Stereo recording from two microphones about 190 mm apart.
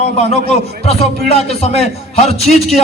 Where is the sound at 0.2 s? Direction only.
35° left (ahead or behind).